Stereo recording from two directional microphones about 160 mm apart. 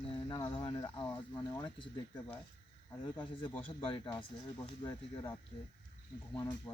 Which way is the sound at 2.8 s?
15° left (ahead or behind).